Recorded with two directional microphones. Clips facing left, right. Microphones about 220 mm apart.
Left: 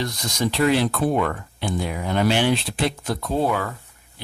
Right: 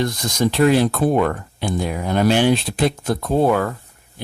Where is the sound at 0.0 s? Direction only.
50° right (ahead or behind).